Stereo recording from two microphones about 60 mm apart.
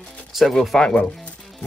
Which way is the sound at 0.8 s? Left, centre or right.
Centre.